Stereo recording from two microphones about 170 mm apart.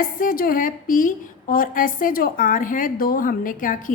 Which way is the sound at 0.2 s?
60° left (ahead or behind).